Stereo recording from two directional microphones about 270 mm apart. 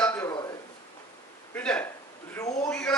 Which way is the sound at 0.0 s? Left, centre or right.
Centre.